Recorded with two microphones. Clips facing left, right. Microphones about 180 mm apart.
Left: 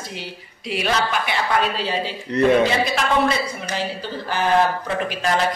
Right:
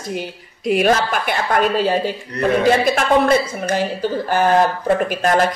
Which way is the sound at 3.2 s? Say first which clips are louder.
Right 6 dB; 50° right (ahead or behind).